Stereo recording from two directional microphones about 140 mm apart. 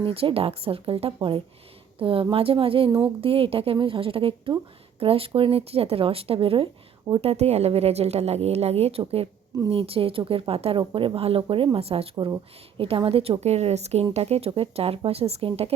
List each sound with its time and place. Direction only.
0.0 s a woman's voice: 40° right (ahead or behind)
12.1 s speech: 30° right (ahead or behind)